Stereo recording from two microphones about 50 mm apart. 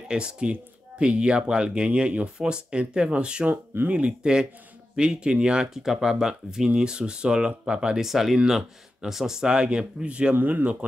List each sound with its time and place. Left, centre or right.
0.1 s speech: centre
3.4 s speech: right
3.9 s speech: centre
8.0 s speech: centre; by 10.3 s right
10.3 s speech: right